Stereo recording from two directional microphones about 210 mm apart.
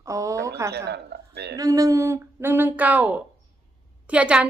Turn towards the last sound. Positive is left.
turn(degrees=-5)  # may be behind; listen again after turning